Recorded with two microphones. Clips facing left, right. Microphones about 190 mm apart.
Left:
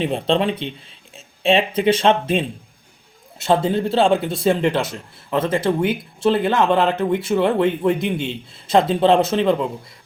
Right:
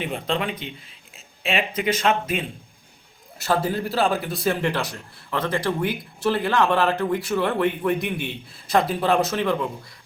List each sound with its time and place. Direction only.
0.0 s a man's voice: 30° left (ahead or behind)